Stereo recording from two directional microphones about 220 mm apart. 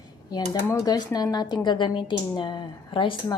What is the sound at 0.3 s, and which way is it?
Speech, 15° left (ahead or behind).